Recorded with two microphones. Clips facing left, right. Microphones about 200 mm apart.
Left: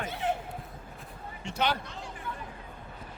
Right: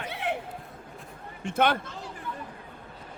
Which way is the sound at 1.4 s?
55° right (ahead or behind).